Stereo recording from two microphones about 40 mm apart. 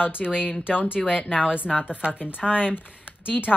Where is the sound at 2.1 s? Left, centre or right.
Left.